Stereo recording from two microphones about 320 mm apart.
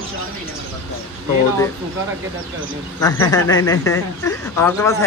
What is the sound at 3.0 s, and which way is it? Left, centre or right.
Speech, centre.